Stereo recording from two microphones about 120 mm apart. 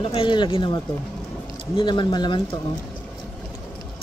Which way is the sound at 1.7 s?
40° left (ahead or behind).